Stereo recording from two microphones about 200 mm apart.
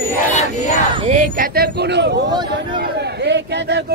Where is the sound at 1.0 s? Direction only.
40° right (ahead or behind); by 2.2 s 60° right (ahead or behind).